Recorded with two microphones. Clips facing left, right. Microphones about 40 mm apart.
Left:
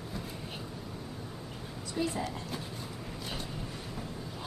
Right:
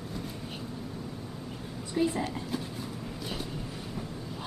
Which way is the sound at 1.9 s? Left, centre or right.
Centre.